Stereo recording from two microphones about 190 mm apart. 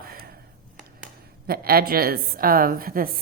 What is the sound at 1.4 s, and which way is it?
A woman's voice, 55° right (ahead or behind).